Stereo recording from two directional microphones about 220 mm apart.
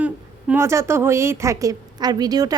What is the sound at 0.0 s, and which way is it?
A woman's voice, 10° right (ahead or behind).